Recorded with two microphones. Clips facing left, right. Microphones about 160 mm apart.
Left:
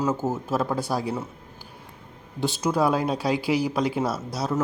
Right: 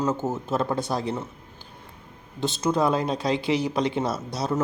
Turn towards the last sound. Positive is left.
turn(degrees=5)  # may be behind; listen again after turning